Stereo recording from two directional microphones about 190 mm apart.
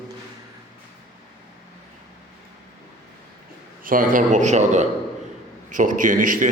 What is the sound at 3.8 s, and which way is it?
A man's voice, 45° right (ahead or behind).